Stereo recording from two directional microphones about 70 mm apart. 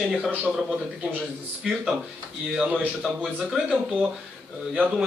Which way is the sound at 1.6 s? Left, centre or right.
Centre.